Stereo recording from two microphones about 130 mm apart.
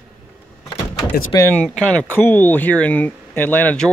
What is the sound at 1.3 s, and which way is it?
Speech, 15° left (ahead or behind).